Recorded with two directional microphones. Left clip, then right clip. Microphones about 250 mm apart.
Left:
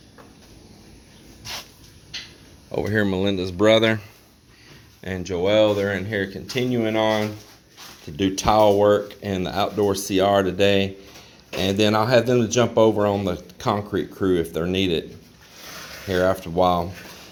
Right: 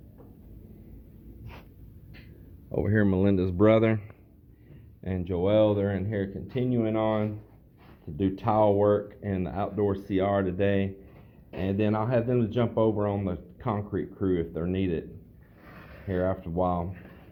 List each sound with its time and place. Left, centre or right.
2.7 s speech: centre
3.7 s speech: centre
16.0 s speech: left